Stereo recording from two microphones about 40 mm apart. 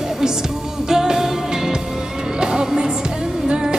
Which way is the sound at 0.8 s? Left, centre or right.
Centre.